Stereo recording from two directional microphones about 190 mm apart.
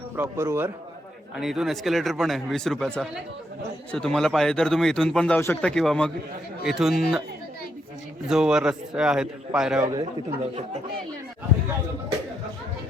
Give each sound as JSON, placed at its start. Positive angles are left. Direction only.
{"t": 0.2, "sound": "a man's voice", "side_deg": -15}
{"t": 1.4, "sound": "a man's voice", "side_deg": 0}
{"t": 8.3, "sound": "a man's voice", "side_deg": -5}